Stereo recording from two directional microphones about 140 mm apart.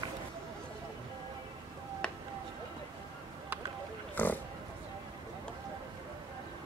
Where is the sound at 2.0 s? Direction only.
5° left (ahead or behind).